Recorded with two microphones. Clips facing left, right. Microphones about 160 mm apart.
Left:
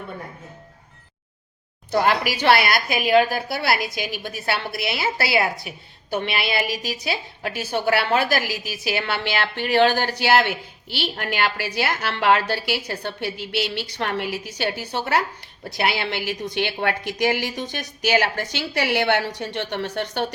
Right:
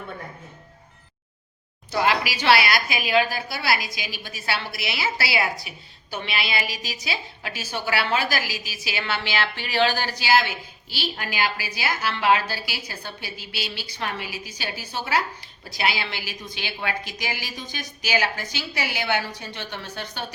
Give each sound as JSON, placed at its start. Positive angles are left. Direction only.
{"t": 1.9, "sound": "a woman's voice", "side_deg": 50}